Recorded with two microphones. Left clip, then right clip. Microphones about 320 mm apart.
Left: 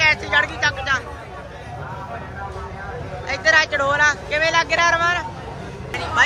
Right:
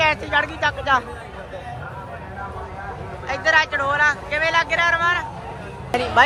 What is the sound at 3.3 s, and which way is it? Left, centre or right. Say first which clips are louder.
Speech: left 1 dB; centre.